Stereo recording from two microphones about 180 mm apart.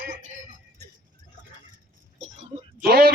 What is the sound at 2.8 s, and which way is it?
Speech, 60° right (ahead or behind).